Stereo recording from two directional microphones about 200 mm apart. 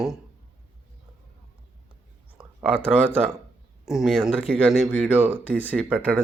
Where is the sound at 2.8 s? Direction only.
10° right (ahead or behind).